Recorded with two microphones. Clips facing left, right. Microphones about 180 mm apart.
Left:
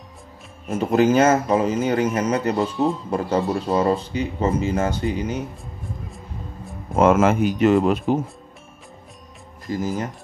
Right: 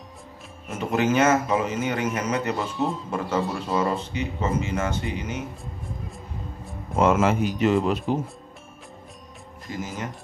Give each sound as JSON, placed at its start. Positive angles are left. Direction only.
{"t": 0.7, "sound": "speech", "side_deg": 35}
{"t": 6.0, "sound": "music", "side_deg": 0}
{"t": 7.0, "sound": "speech", "side_deg": 50}
{"t": 9.7, "sound": "speech", "side_deg": 35}